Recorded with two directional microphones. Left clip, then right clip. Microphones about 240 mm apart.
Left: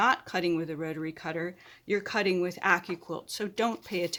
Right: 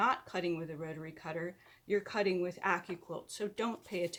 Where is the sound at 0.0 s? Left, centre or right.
Left.